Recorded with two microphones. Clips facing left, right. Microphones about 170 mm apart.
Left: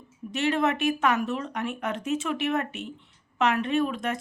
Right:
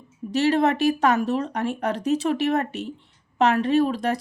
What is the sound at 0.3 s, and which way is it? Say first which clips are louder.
Speech: right 5 dB; 35° right (ahead or behind).